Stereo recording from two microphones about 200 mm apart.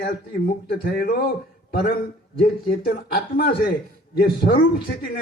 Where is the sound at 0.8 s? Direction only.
50° left (ahead or behind).